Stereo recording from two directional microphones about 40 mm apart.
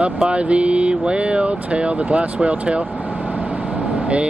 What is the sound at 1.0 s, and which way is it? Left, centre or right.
Speech, right.